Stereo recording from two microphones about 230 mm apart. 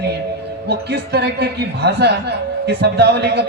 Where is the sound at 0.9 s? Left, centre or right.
Right.